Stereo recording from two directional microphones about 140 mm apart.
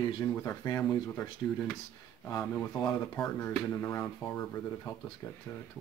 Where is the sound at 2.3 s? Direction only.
15° left (ahead or behind).